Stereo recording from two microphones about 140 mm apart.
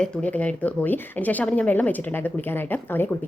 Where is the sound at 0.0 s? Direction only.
10° left (ahead or behind).